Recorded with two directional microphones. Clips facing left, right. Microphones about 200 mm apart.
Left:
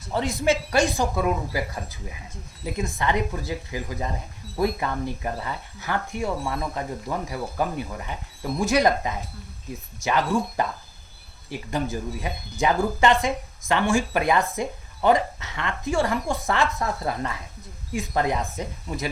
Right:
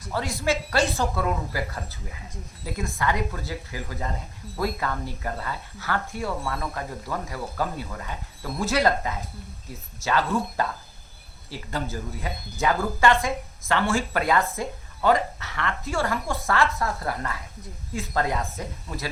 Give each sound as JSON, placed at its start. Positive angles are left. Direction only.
{"t": 0.1, "sound": "speech", "side_deg": 20}